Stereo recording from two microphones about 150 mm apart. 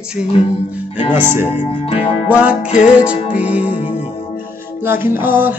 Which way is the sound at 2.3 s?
10° right (ahead or behind).